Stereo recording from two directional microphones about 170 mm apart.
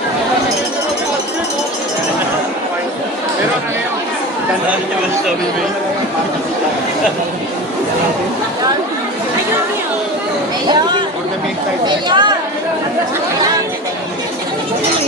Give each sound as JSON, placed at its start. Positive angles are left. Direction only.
{"t": 11.8, "sound": "speech", "side_deg": -25}